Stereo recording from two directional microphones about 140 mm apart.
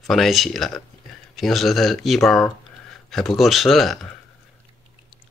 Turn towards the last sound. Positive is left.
turn(degrees=0)  # may be behind; listen again after turning